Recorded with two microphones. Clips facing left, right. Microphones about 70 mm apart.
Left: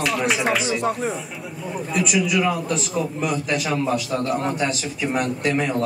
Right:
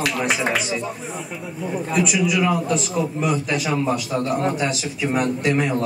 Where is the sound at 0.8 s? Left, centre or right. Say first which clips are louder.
Left 6 dB; left.